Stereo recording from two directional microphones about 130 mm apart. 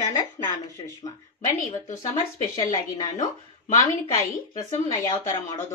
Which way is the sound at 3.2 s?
90° left.